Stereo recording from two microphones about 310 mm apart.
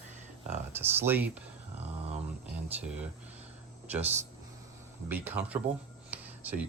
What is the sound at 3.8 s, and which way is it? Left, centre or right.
Speech, centre.